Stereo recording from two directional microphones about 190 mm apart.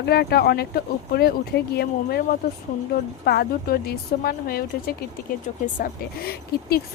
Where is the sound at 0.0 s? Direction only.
60° left (ahead or behind).